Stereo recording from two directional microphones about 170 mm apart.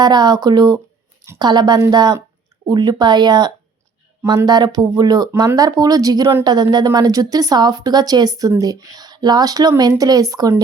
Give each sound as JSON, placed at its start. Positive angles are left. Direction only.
{"t": 0.0, "sound": "speech", "side_deg": -25}